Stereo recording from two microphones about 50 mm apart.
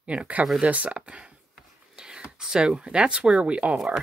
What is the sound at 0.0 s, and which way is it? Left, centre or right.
Speech, right.